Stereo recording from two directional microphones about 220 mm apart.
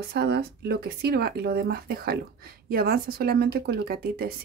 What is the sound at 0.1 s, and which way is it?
A woman's voice, 45° right (ahead or behind).